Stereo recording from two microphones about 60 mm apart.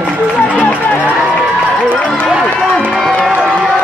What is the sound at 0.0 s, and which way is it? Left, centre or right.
Music, left.